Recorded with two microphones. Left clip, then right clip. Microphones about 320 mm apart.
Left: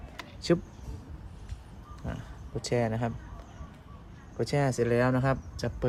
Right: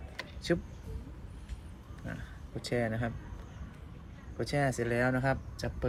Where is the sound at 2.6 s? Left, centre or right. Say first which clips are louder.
Left 4 dB; left.